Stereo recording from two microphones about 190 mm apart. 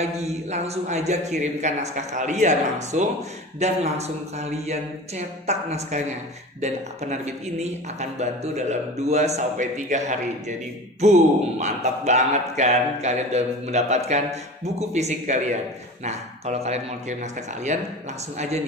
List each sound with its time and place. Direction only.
0.0 s speech: 35° right (ahead or behind)